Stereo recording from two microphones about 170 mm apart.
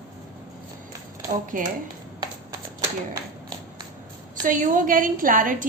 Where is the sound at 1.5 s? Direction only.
55° right (ahead or behind).